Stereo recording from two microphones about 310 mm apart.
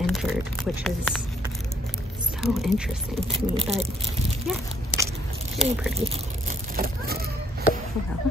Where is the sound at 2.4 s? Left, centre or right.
Centre.